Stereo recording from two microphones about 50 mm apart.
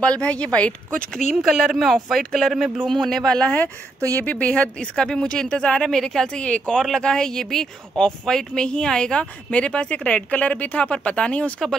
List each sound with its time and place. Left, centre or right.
0.0 s speech: left
1.1 s speech: centre
4.2 s speech: left